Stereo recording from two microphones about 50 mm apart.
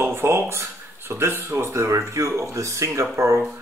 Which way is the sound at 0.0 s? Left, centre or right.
Right.